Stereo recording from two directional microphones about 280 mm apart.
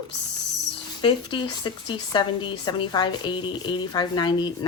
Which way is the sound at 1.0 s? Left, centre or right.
Centre.